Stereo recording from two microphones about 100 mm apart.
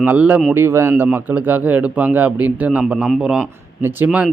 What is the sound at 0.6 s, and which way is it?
Speech, 25° right (ahead or behind).